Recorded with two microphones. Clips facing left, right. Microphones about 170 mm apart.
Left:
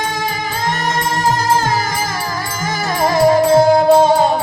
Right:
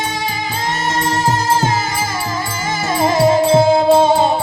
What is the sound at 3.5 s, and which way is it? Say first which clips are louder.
Music: left 1 dB; 45° left (ahead or behind).